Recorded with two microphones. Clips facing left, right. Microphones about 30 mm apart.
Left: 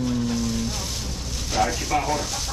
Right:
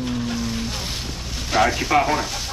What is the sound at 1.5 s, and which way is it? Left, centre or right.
Speech, right.